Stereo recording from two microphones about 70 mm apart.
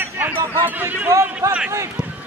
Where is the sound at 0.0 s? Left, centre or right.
Right.